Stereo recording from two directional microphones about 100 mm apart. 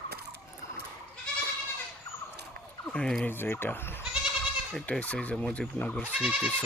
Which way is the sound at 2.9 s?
10° left (ahead or behind).